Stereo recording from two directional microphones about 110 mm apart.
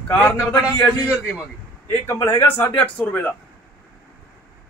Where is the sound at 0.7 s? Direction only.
35° left (ahead or behind); by 3.3 s 15° left (ahead or behind).